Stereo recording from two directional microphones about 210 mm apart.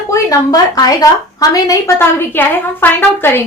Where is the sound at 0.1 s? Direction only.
15° left (ahead or behind).